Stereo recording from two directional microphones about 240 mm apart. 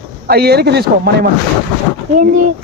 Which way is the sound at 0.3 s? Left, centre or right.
Right.